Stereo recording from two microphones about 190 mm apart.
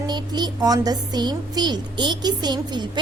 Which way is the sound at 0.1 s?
20° right (ahead or behind).